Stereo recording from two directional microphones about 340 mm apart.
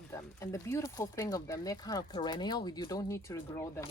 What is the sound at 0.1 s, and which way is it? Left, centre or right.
Speech, centre.